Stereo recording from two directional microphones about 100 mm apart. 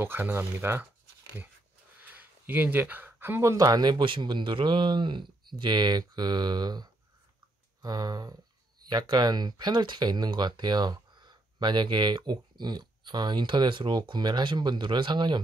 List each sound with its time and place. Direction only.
0.0 s speech: 25° right (ahead or behind)
2.0 s speech: 15° right (ahead or behind); by 15.4 s 50° right (ahead or behind)